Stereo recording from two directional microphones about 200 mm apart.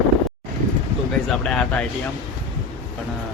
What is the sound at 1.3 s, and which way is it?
Speech, 5° left (ahead or behind).